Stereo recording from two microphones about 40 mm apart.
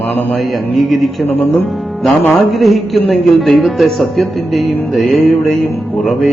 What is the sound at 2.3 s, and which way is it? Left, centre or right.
Speech, centre.